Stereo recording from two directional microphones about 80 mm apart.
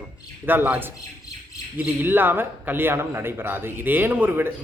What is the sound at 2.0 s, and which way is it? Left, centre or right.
A man's voice, right.